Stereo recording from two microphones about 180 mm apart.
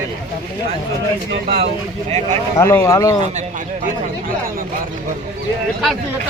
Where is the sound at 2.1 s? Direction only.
35° right (ahead or behind).